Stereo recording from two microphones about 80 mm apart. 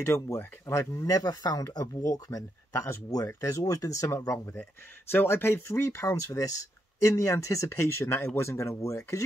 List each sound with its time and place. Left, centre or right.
0.0 s speech: left
4.6 s speech: left